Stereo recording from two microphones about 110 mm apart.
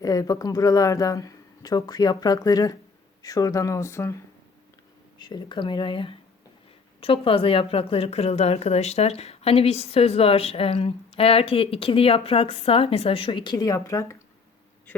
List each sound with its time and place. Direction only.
0.0 s speech: 30° left (ahead or behind)
5.2 s a woman's voice: 45° left (ahead or behind)
13.7 s speech: 30° left (ahead or behind)